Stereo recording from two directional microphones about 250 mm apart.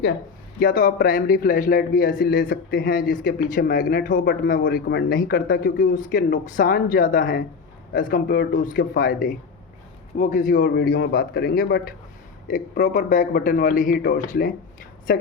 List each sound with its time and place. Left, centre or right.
0.6 s speech: left